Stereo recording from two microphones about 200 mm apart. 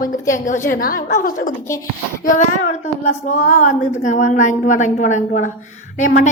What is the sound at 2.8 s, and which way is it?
A woman's voice, 35° left (ahead or behind).